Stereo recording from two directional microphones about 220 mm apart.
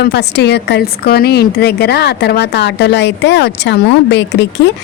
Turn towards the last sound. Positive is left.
turn(degrees=50)  # may be behind; listen again after turning